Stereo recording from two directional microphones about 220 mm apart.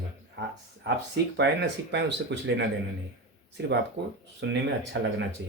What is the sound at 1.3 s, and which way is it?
Speech, 50° right (ahead or behind).